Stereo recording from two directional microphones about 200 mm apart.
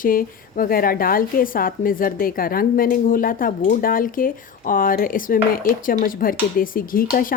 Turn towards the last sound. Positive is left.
turn(degrees=45)  # may be behind; listen again after turning